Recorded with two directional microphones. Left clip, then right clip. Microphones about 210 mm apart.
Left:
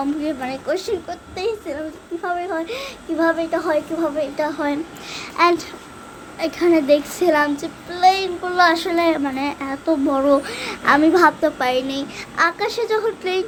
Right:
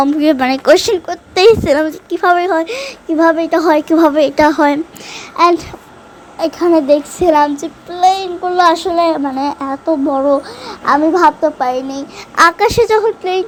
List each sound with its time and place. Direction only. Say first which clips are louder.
0.0 s a woman's voice: right 12 dB; 45° right (ahead or behind)
5.4 s a child's voice: right 6 dB; 25° right (ahead or behind)
10.7 s a sound: right 4 dB; 5° left (ahead or behind)
11.1 s a woman's voice: right 6 dB; 5° left (ahead or behind)
11.6 s a child's voice: right 4 dB; 15° right (ahead or behind)
12.4 s a woman's voice: right 10 dB; 40° right (ahead or behind)